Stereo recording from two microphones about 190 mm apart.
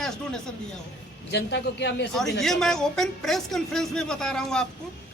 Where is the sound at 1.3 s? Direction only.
65° left (ahead or behind).